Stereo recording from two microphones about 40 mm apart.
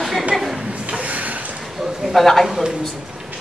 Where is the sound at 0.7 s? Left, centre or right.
Right.